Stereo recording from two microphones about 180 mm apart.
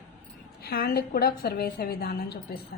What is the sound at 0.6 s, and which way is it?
A woman's voice, 60° left (ahead or behind).